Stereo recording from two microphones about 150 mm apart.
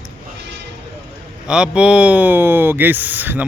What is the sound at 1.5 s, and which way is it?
A man's voice, 5° right (ahead or behind).